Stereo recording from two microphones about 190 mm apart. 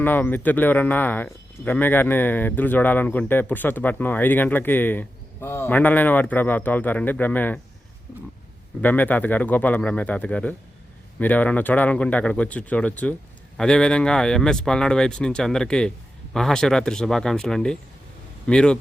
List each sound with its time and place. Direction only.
0.0 s speech: 10° left (ahead or behind)
8.8 s speech: 10° left (ahead or behind)